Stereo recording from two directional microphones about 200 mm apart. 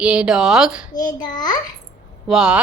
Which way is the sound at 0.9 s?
40° left (ahead or behind).